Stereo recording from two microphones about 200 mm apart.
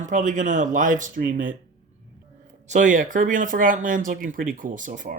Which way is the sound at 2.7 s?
40° right (ahead or behind).